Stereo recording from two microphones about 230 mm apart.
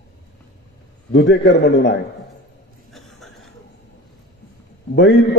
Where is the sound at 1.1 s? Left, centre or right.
Left.